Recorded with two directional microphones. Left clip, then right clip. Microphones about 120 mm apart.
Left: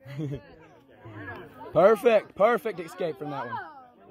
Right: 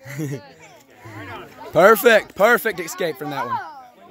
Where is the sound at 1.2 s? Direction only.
Centre (ahead or behind).